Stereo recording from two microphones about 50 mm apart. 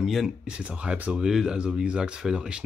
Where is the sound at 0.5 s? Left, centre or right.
Right.